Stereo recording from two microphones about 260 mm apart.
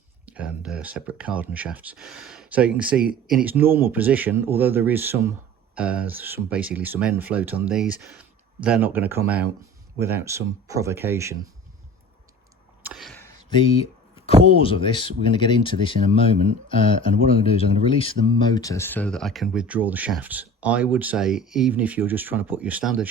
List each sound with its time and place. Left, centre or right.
0.3 s speech: centre
12.9 s a sound: centre
14.5 s speech: left; by 23.0 s centre